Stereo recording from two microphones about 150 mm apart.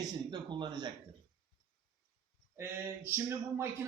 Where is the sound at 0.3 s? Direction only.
30° right (ahead or behind).